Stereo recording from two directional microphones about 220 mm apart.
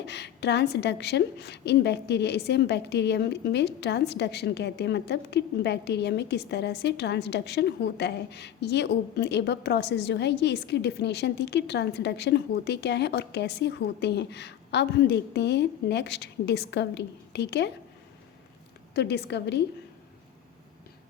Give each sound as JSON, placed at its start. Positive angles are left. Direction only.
{"t": 0.0, "sound": "a woman's voice", "side_deg": 50}
{"t": 18.9, "sound": "a woman's voice", "side_deg": 50}